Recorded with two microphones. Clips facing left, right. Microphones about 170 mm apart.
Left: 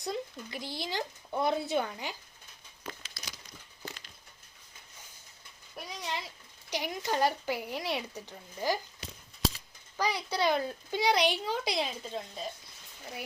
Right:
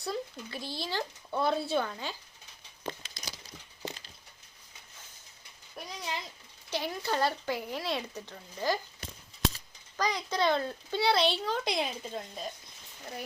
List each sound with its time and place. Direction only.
0.0 s speech: 20° left (ahead or behind)
2.8 s a sound: 30° right (ahead or behind)
5.7 s a child's voice: centre (ahead or behind)
6.7 s speech: 15° left (ahead or behind)
10.0 s speech: 10° left (ahead or behind)
11.6 s a woman's voice: centre (ahead or behind)